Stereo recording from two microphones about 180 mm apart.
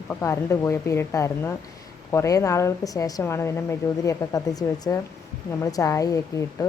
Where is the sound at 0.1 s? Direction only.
15° left (ahead or behind).